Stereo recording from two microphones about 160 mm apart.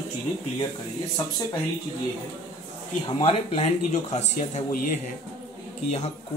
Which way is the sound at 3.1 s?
40° left (ahead or behind).